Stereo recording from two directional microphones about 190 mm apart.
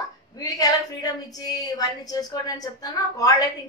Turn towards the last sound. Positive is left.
turn(degrees=20)  # may be behind; listen again after turning